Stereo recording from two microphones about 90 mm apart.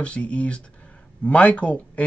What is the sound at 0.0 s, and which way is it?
Speech, 15° left (ahead or behind).